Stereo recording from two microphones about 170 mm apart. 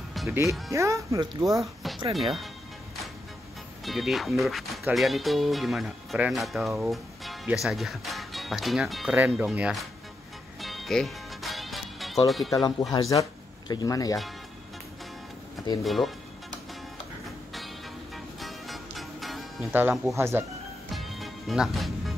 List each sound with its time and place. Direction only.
0.3 s speech: 15° right (ahead or behind)
1.6 s music: centre (ahead or behind)
2.1 s speech: centre (ahead or behind)
3.8 s speech: centre (ahead or behind)
10.6 s music: centre (ahead or behind)
12.4 s speech: 20° left (ahead or behind)
15.8 s speech: centre (ahead or behind)
18.1 s music: centre (ahead or behind)
19.7 s speech: 10° right (ahead or behind)
20.9 s music: centre (ahead or behind)